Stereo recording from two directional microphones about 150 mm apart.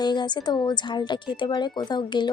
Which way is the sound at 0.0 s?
30° left (ahead or behind).